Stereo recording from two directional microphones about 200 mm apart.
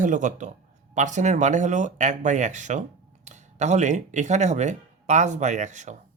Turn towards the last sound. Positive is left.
turn(degrees=-35)  # may be behind; listen again after turning